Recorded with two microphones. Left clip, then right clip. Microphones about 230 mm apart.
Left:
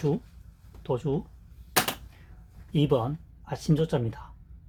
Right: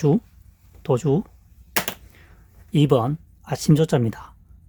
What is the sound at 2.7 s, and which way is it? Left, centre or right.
Speech, right.